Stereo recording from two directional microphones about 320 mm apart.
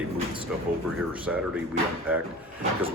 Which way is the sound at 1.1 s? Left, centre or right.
Centre.